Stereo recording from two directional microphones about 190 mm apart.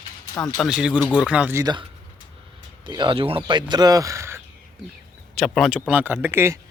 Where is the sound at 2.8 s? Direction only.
25° right (ahead or behind).